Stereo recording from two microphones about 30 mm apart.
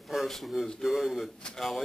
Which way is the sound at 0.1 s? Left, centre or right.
Centre.